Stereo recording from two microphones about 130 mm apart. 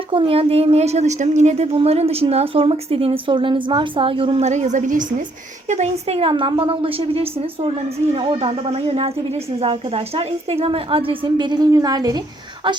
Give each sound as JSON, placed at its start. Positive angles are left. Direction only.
{"t": 0.1, "sound": "a woman's voice", "side_deg": -45}
{"t": 4.4, "sound": "a woman's voice", "side_deg": -60}
{"t": 5.6, "sound": "a woman's voice", "side_deg": -60}